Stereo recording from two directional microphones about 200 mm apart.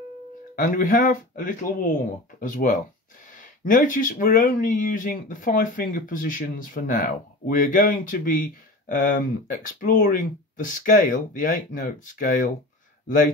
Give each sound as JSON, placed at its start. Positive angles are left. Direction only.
{"t": 0.6, "sound": "speech", "side_deg": 40}